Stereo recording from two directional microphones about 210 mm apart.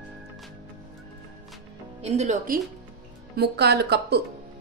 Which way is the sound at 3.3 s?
50° right (ahead or behind).